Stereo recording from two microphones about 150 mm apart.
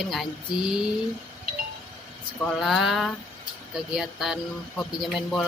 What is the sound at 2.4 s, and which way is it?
A woman's voice, 5° left (ahead or behind).